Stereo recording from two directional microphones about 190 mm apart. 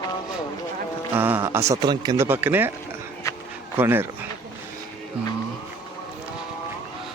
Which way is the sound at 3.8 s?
10° right (ahead or behind).